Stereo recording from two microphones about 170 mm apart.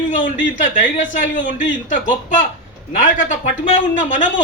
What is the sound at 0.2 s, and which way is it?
Speech, 50° left (ahead or behind).